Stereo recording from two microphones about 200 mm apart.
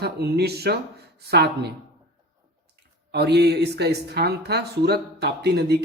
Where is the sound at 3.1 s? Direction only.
55° right (ahead or behind).